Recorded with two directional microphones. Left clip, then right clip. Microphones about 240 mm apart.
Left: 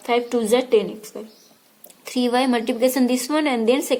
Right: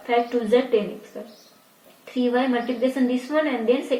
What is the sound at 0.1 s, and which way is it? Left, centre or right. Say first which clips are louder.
Speech: left 1 dB; left.